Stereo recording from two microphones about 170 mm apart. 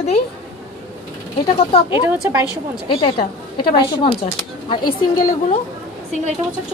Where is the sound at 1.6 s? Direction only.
35° left (ahead or behind).